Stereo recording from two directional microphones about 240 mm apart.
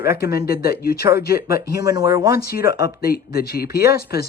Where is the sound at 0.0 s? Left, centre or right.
Left.